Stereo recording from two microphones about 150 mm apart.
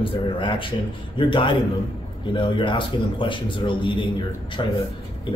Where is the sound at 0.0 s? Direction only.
35° left (ahead or behind).